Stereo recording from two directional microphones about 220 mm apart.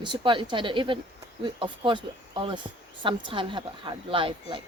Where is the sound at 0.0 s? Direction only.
20° right (ahead or behind).